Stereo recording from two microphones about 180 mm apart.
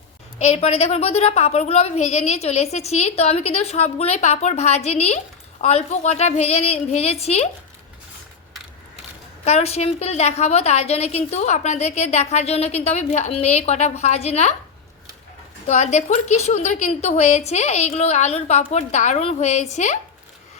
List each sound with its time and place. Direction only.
0.3 s a woman's voice: 35° left (ahead or behind)
9.4 s a woman's voice: 35° left (ahead or behind)
15.6 s a woman's voice: 40° left (ahead or behind)